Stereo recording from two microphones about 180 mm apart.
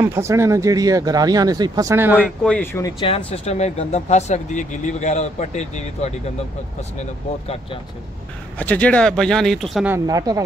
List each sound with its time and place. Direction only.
0.0 s speech: 15° right (ahead or behind)
2.4 s speech: 10° left (ahead or behind)
3.0 s speech: 30° left (ahead or behind)
8.5 s speech: 10° left (ahead or behind)
9.8 s speech: 15° right (ahead or behind)